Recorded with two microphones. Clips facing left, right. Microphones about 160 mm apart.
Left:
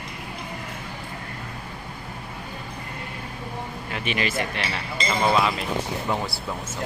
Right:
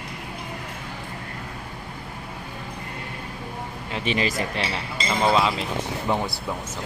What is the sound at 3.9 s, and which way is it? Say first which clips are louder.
Speech: right 2 dB; 30° right (ahead or behind).